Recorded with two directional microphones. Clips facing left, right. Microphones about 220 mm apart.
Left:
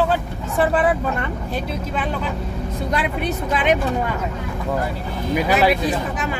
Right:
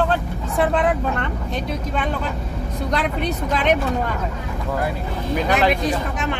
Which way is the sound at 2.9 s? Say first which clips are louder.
Right 1 dB; 5° left (ahead or behind).